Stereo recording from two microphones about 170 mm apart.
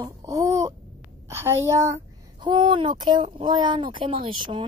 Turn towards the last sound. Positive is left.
turn(degrees=-30)  # may be behind; listen again after turning